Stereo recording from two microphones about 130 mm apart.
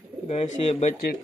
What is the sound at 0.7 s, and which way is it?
Speech, 60° left (ahead or behind).